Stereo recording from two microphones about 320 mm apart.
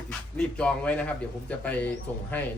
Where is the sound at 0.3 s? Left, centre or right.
Centre.